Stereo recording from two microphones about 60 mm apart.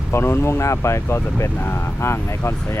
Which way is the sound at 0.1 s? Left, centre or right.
Left.